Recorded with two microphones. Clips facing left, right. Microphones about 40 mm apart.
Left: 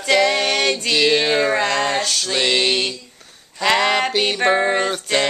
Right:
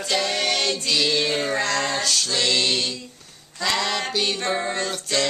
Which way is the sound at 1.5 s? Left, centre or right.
Left.